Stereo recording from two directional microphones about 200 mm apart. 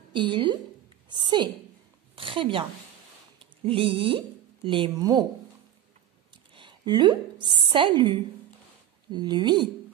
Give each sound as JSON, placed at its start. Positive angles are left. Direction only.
{"t": 0.1, "sound": "a woman's voice", "side_deg": -25}
{"t": 6.5, "sound": "a sound", "side_deg": -25}
{"t": 7.4, "sound": "a woman's voice", "side_deg": -25}